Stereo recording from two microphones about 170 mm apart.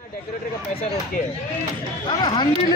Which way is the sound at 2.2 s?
30° left (ahead or behind).